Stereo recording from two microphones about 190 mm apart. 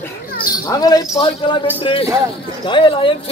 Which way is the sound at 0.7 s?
20° left (ahead or behind).